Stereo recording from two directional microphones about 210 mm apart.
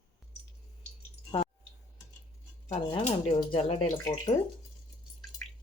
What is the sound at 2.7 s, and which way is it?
Speech, 30° left (ahead or behind).